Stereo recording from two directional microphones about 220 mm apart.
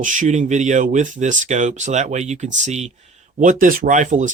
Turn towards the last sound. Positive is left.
turn(degrees=-35)  # may be behind; listen again after turning